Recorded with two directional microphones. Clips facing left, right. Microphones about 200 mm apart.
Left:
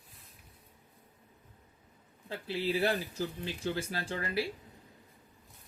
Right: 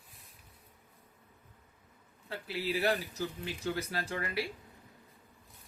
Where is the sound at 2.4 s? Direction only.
30° left (ahead or behind).